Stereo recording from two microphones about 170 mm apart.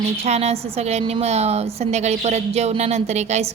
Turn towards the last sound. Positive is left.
turn(degrees=-40)  # may be behind; listen again after turning